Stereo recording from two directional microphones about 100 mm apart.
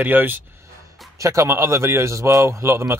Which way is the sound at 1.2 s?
30° right (ahead or behind).